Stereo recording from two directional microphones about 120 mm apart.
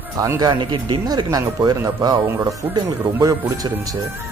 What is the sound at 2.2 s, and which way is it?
Speech, 20° right (ahead or behind).